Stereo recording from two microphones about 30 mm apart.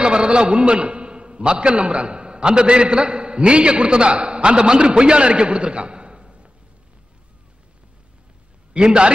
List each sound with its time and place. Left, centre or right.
0.0 s a man's voice: right
8.7 s a man's voice: right